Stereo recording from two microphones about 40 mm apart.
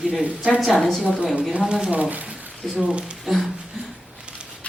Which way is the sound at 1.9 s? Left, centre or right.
Right.